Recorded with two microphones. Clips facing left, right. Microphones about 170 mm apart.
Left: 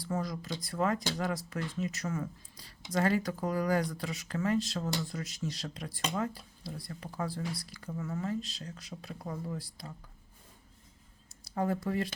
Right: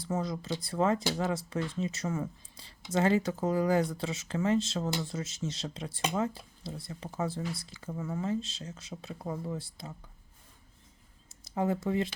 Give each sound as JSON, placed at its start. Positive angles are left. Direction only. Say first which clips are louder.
{"t": 0.0, "sound": "speech", "louder": "right 2 dB", "side_deg": -25}
{"t": 11.4, "sound": "speech", "louder": "right 2 dB", "side_deg": -20}